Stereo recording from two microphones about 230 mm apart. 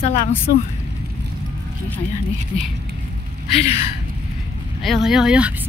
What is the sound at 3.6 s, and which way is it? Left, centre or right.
Speech, left.